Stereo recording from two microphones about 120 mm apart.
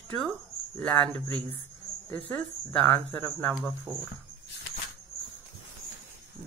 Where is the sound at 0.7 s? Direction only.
10° left (ahead or behind).